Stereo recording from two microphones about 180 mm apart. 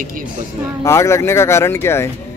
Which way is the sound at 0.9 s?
15° left (ahead or behind).